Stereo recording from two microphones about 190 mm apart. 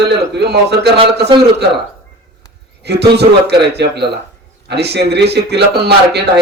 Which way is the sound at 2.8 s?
60° right (ahead or behind).